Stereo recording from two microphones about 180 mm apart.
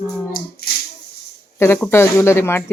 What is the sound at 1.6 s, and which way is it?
Speech, 10° left (ahead or behind).